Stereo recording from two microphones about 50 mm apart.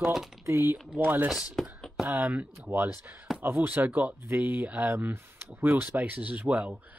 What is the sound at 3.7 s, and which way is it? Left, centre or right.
Speech, right.